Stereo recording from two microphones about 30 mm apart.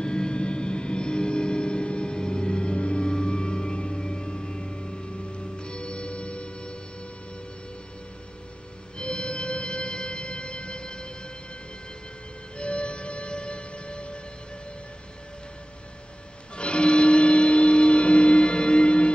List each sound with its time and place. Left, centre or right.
0.0 s vehicle: left
8.9 s music: left
12.5 s music: left
16.5 s a sound: left